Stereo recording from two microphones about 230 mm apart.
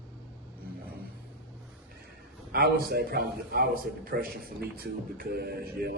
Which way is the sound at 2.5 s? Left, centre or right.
Right.